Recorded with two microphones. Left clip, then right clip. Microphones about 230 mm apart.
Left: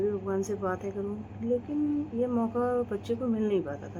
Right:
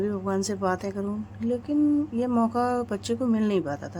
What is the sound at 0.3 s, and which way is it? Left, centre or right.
Speech, right.